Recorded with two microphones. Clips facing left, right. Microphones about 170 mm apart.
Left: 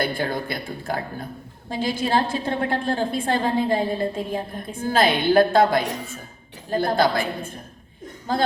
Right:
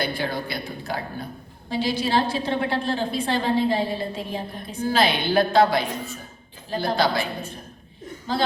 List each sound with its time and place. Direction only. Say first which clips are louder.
0.0 s a woman's voice: left 2 dB; 50° left (ahead or behind)